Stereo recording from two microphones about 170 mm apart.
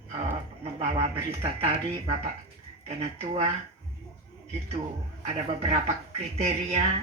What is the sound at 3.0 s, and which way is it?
Speech, 35° right (ahead or behind).